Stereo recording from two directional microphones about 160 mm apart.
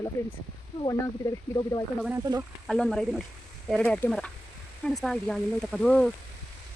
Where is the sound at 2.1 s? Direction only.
20° right (ahead or behind).